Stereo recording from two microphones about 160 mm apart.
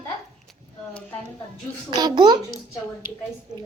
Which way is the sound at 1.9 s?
25° right (ahead or behind).